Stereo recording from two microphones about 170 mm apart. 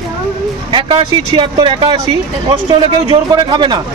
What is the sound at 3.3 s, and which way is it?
Speech, 25° right (ahead or behind).